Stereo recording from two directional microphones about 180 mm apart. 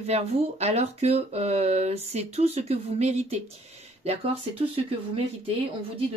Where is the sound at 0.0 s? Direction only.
35° right (ahead or behind).